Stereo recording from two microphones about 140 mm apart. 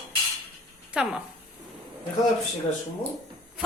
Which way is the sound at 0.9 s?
10° right (ahead or behind).